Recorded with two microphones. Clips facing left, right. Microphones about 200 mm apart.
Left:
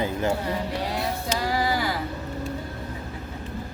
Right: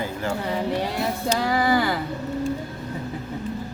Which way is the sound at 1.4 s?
55° right (ahead or behind).